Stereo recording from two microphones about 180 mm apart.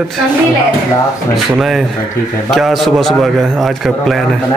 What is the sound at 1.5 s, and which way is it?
A man's voice, centre (ahead or behind).